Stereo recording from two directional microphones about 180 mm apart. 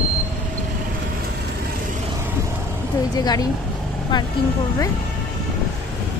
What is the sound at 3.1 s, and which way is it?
Speech, 20° left (ahead or behind).